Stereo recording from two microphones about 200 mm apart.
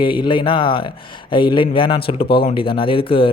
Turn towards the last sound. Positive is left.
turn(degrees=25)  # may be behind; listen again after turning